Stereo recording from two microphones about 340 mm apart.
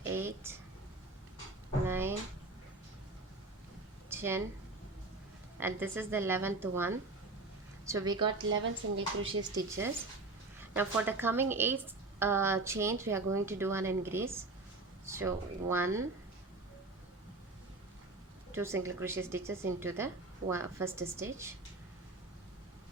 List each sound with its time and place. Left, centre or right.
0.2 s a sound: centre
1.9 s a sound: centre
4.1 s speech: centre
5.5 s speech: centre
8.3 s speech: right
9.6 s speech: centre
18.5 s speech: centre